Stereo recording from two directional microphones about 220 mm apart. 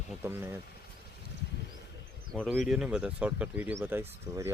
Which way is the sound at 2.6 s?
5° right (ahead or behind).